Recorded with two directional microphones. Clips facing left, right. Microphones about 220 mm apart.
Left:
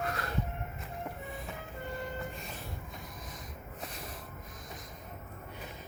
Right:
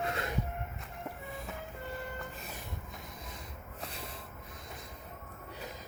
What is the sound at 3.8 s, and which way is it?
Music, 30° right (ahead or behind).